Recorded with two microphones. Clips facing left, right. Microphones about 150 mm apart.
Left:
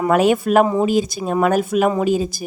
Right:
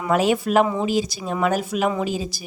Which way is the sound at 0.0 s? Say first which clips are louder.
Left 4 dB; 55° left (ahead or behind).